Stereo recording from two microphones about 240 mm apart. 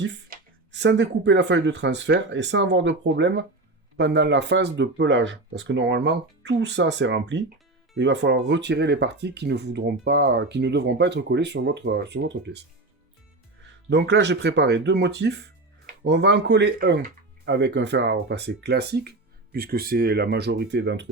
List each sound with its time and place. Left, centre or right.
0.0 s speech: right
13.9 s speech: right